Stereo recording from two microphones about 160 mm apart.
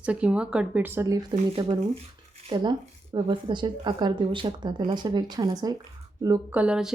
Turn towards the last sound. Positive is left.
turn(degrees=-5)  # may be behind; listen again after turning